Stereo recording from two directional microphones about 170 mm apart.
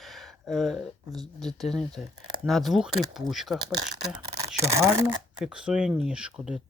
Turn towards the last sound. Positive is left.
turn(degrees=-5)  # may be behind; listen again after turning